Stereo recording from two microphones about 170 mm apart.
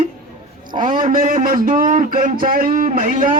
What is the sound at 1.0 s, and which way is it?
Speech, 50° right (ahead or behind).